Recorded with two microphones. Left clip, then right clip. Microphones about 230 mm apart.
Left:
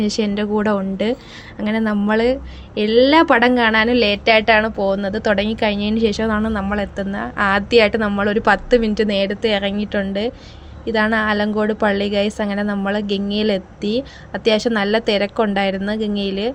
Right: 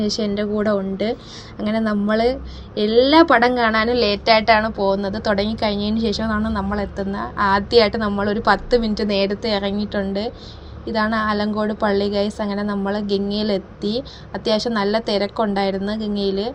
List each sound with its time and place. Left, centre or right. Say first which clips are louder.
0.0 s speech: left 2 dB; left
0.3 s a woman's voice: even; left
1.5 s a woman's voice: left 1 dB; left
13.1 s speech: even; left
14.3 s a woman's voice: left 3 dB; left